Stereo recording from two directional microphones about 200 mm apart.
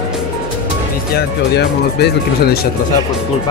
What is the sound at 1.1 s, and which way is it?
Speech, 55° left (ahead or behind).